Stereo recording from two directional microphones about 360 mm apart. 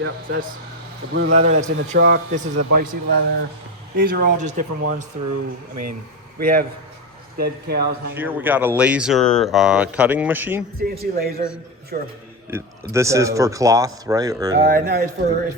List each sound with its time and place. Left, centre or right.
0.0 s speech: right
1.9 s speech: right
2.6 s speech: right
2.8 s speech: right
4.9 s speech: right
6.4 s speech: right
8.1 s speech: centre
10.8 s speech: right
12.5 s speech: centre
14.7 s speech: right